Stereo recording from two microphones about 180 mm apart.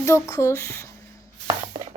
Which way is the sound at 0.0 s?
15° left (ahead or behind).